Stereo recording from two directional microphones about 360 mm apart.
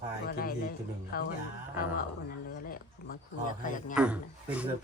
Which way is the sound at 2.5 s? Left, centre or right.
Left.